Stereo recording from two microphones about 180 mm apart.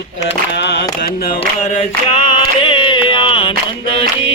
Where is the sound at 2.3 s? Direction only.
30° left (ahead or behind).